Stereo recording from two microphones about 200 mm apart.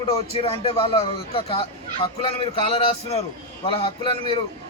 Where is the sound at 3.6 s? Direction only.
25° left (ahead or behind).